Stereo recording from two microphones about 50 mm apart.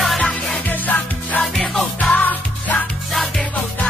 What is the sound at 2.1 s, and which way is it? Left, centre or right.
Music, left.